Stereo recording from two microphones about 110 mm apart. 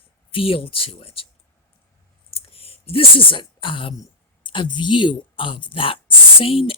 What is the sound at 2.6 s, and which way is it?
Speech, 60° left (ahead or behind).